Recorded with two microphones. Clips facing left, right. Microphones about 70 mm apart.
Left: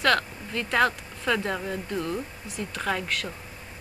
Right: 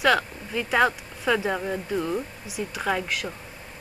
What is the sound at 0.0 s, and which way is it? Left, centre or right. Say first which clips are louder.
A woman's voice: right 2 dB; centre.